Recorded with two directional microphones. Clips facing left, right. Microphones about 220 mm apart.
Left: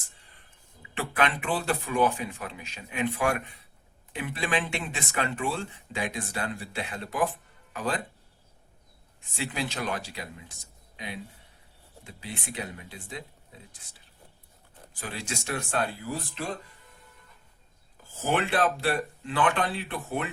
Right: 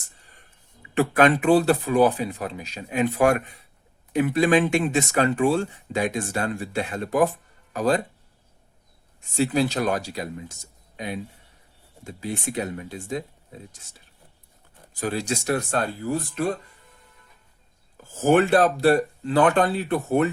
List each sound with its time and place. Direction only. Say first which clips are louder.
0.9 s speech: right 10 dB; 45° right (ahead or behind)
9.3 s speech: right 11 dB; 40° right (ahead or behind)
15.0 s speech: right 10 dB; 40° right (ahead or behind)
18.2 s speech: right 9 dB; 45° right (ahead or behind)